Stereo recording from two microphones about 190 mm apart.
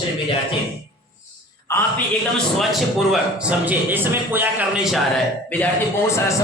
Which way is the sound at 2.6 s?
Centre (ahead or behind).